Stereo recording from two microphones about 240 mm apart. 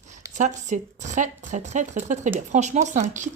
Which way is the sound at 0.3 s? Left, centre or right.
Right.